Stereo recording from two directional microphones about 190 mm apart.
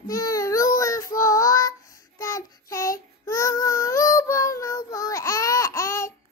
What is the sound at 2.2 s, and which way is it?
Child singing, 15° left (ahead or behind).